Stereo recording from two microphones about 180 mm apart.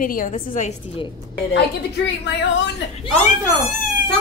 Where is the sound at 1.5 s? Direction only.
75° left (ahead or behind).